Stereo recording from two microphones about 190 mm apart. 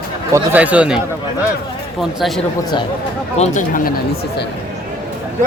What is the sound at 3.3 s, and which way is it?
Speech, 35° left (ahead or behind).